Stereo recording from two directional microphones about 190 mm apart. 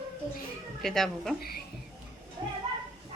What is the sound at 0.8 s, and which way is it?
Speech, centre (ahead or behind).